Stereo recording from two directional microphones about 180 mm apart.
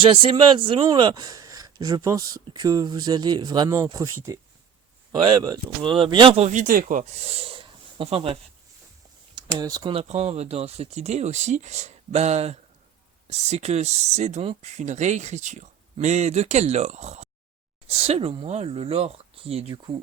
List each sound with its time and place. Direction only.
0.0 s speech: 30° right (ahead or behind)
9.3 s speech: 20° right (ahead or behind)